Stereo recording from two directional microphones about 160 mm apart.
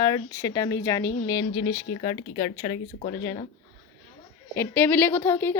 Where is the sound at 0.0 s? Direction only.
20° left (ahead or behind).